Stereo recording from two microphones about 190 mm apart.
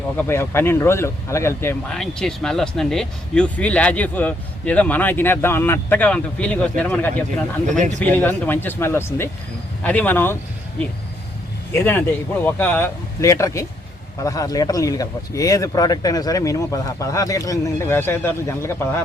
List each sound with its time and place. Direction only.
0.2 s speech: 15° left (ahead or behind)
11.7 s speech: 10° left (ahead or behind)